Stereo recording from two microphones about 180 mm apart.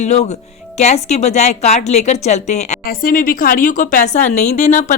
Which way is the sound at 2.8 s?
55° left (ahead or behind).